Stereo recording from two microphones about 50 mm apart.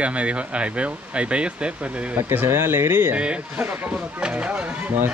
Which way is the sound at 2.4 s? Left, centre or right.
Right.